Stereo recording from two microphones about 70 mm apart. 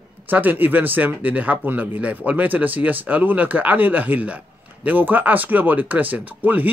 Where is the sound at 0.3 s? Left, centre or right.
Right.